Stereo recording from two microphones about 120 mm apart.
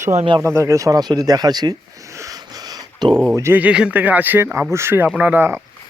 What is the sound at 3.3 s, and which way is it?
Speech, 20° right (ahead or behind).